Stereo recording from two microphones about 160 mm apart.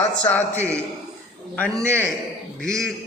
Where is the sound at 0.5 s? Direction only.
15° right (ahead or behind).